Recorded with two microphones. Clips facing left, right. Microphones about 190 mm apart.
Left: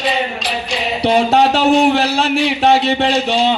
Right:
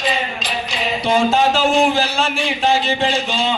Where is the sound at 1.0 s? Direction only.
65° left (ahead or behind).